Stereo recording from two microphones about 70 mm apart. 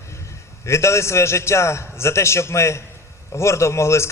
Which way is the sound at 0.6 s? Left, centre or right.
Left.